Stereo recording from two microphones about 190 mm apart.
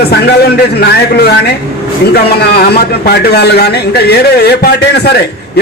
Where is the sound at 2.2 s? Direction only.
55° left (ahead or behind).